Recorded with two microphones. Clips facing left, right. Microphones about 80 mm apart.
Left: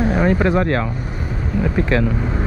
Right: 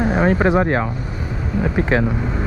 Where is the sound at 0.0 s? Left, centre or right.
Right.